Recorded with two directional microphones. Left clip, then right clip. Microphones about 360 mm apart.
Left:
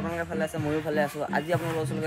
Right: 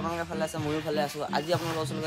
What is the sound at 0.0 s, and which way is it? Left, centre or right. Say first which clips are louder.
Speech: left 1 dB; centre.